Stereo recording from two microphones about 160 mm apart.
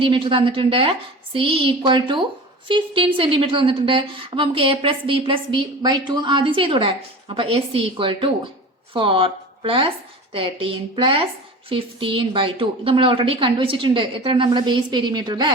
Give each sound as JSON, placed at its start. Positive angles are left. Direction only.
{"t": 0.0, "sound": "a woman's voice", "side_deg": -30}